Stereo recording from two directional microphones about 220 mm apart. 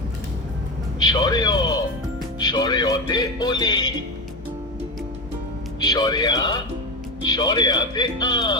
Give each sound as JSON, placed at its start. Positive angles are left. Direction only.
{"t": 0.9, "sound": "a man's voice", "side_deg": 15}
{"t": 5.8, "sound": "a man's voice", "side_deg": 20}